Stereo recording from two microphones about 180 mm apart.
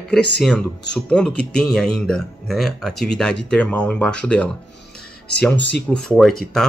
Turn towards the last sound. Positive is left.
turn(degrees=0)  # may be behind; listen again after turning